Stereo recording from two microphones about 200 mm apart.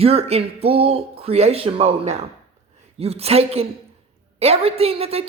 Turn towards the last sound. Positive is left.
turn(degrees=-30)  # may be behind; listen again after turning